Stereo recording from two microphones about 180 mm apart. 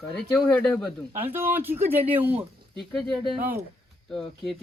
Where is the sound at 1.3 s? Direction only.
10° right (ahead or behind).